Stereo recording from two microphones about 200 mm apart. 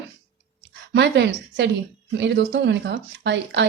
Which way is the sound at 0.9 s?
60° right (ahead or behind).